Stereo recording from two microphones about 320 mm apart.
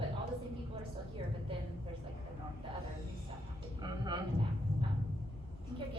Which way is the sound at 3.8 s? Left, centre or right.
Centre.